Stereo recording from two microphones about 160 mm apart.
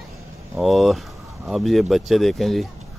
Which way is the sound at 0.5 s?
Centre (ahead or behind).